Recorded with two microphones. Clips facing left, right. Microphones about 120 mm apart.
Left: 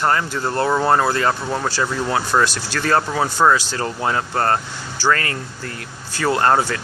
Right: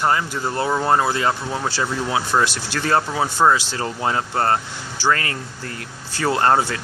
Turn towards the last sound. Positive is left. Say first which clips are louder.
# left 1 dB
turn(degrees=-25)  # may be behind; listen again after turning